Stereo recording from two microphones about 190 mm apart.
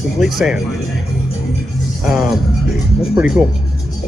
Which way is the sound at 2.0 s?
Centre (ahead or behind).